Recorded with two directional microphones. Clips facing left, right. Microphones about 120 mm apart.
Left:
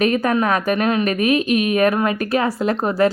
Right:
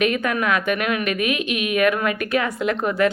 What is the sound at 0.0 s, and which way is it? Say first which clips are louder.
A woman's voice: left 4 dB; 35° left (ahead or behind).